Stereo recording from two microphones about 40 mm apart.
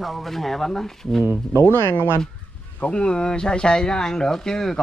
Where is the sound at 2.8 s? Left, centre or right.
Left.